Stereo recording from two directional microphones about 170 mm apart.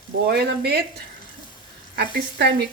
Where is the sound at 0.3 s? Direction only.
70° right (ahead or behind).